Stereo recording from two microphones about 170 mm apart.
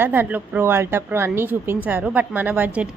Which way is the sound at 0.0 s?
10° right (ahead or behind).